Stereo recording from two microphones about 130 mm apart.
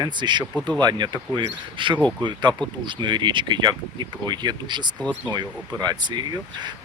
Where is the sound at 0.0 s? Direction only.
35° right (ahead or behind).